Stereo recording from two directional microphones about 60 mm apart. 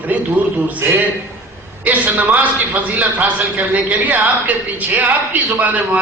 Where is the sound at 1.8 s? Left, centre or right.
Right.